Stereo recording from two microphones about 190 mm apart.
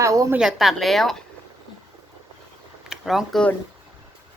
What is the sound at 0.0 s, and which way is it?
Speech, 15° right (ahead or behind).